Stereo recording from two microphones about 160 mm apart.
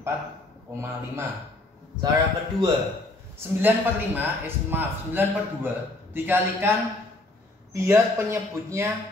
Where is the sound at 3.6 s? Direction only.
10° right (ahead or behind).